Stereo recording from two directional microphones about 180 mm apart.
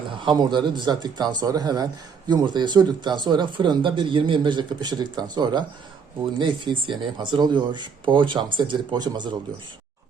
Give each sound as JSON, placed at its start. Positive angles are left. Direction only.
{"t": 0.3, "sound": "speech", "side_deg": -25}